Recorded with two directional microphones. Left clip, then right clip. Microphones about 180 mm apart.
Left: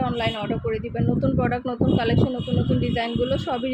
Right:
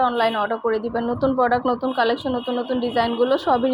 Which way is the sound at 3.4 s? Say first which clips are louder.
Right 7 dB; centre (ahead or behind).